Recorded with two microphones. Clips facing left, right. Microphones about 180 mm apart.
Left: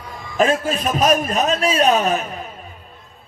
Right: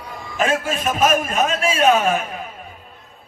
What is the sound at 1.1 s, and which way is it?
Speech, 40° left (ahead or behind).